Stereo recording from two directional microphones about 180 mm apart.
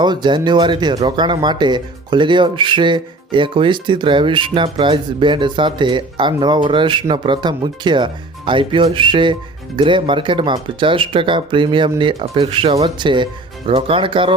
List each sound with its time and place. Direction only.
0.0 s speech: 25° right (ahead or behind)